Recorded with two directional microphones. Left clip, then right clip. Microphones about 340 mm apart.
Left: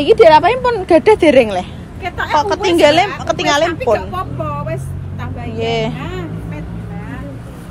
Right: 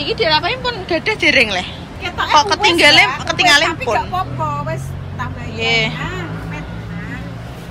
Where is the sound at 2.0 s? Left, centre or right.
Centre.